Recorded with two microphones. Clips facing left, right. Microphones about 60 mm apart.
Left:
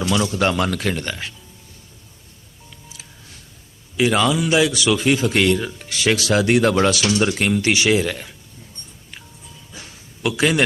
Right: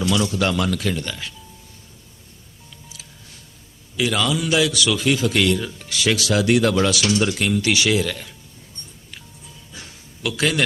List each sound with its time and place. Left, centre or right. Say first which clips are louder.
0.1 s speech: left 3 dB; left
0.7 s speech: left 1 dB; left
3.9 s speech: left 4 dB; left
10.2 s speech: left 3 dB; left